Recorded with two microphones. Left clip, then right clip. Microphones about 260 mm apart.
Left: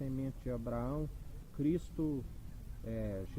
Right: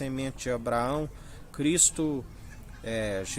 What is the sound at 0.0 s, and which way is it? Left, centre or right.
Speech, centre.